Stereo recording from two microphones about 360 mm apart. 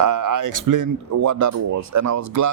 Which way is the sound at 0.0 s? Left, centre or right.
Right.